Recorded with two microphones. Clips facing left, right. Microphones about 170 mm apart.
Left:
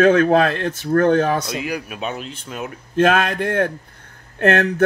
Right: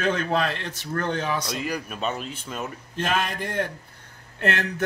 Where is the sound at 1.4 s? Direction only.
5° left (ahead or behind).